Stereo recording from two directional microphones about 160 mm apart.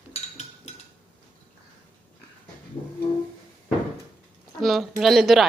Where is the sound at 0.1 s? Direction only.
40° left (ahead or behind).